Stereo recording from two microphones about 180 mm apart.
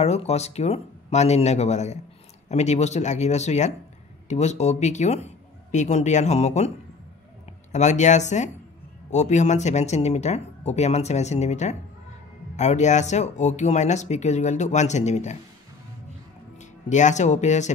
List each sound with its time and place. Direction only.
0.0 s speech: 35° left (ahead or behind)
7.7 s speech: 40° left (ahead or behind)
16.9 s speech: 40° left (ahead or behind)